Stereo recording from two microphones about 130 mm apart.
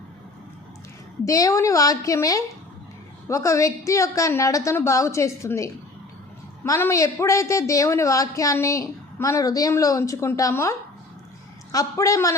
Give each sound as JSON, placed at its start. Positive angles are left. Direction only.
{"t": 1.2, "sound": "a woman's voice", "side_deg": 25}